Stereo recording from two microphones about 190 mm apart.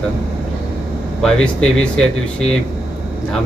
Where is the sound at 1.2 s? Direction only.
5° left (ahead or behind).